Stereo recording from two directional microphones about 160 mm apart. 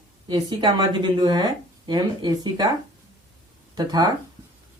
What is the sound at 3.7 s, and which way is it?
Speech, 25° right (ahead or behind).